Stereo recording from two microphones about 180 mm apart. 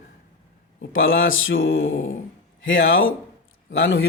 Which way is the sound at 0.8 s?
90° left.